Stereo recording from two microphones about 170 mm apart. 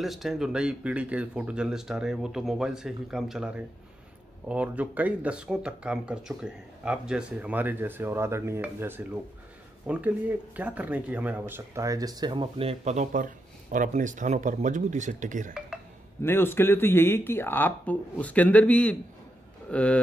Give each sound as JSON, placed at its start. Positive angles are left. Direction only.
{"t": 0.0, "sound": "speech", "side_deg": 0}
{"t": 16.2, "sound": "speech", "side_deg": 15}